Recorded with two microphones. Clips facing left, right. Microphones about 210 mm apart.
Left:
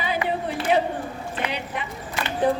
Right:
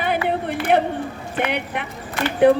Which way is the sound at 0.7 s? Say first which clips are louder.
Right 3 dB; 60° right (ahead or behind).